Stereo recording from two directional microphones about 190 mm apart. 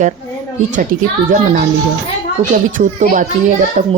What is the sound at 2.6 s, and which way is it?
Speech, 40° right (ahead or behind).